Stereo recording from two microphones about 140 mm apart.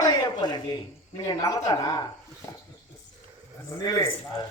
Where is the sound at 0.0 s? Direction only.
30° left (ahead or behind).